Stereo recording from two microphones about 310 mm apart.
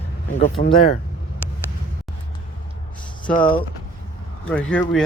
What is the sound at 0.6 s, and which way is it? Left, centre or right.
Speech, left.